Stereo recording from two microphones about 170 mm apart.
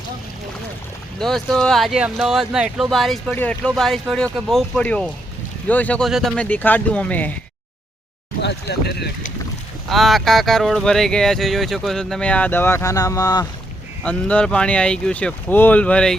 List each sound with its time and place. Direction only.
1.2 s speech: centre (ahead or behind)
8.4 s speech: 85° left
9.9 s speech: centre (ahead or behind); by 13.5 s 20° left (ahead or behind)
14.0 s speech: 10° left (ahead or behind)